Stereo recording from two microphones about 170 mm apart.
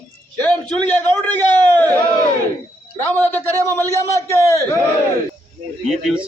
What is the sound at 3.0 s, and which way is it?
A man's voice, 15° left (ahead or behind).